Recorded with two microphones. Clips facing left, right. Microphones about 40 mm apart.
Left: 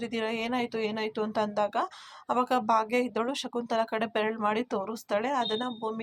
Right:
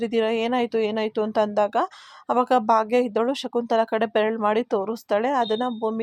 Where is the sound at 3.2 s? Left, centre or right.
Centre.